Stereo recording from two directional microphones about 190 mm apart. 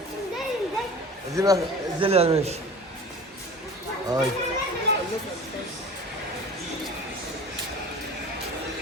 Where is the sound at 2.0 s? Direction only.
30° right (ahead or behind).